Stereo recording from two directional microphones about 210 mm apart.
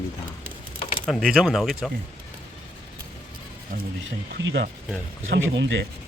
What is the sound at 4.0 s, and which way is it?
Speech, 60° right (ahead or behind).